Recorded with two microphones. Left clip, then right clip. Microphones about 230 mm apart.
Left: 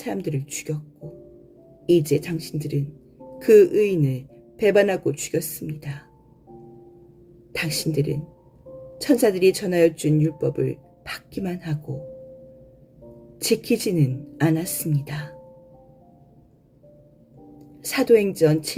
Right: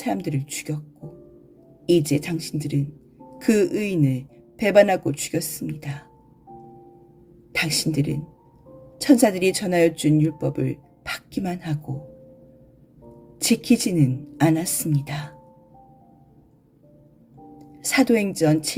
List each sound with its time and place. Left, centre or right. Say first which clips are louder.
0.0 s speech: right 2 dB; right
1.9 s speech: left 1 dB; right
7.5 s speech: right 2 dB; right
13.4 s speech: even; right
17.8 s speech: left 2 dB; right